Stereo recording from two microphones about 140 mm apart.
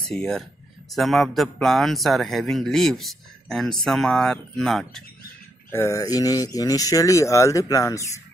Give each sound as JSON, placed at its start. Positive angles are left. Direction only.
{"t": 0.0, "sound": "speech", "side_deg": 5}
{"t": 5.7, "sound": "speech", "side_deg": 20}